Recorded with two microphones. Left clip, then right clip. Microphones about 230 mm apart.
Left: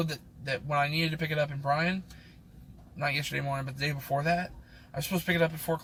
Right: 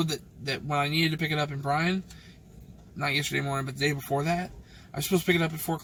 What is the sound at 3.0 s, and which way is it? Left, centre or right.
Speech, centre.